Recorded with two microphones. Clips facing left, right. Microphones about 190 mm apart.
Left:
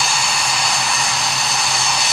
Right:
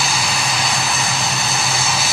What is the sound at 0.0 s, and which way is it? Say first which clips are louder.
Vehicle: right 1 dB; centre (ahead or behind).